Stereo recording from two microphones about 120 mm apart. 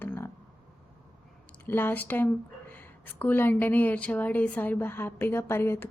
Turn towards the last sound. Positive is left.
turn(degrees=20)  # may be behind; listen again after turning